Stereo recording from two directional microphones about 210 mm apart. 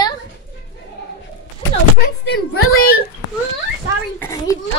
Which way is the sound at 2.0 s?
50° left (ahead or behind).